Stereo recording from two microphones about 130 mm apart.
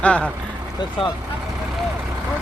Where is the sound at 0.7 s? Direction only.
35° left (ahead or behind).